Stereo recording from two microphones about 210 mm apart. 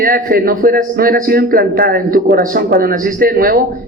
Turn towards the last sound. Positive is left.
turn(degrees=-45)  # may be behind; listen again after turning